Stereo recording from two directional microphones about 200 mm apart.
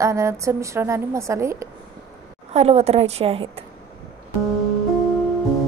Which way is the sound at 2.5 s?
30° right (ahead or behind).